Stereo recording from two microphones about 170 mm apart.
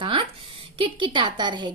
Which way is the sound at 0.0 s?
30° right (ahead or behind).